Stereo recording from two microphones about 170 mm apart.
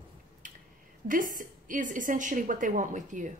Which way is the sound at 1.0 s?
50° right (ahead or behind).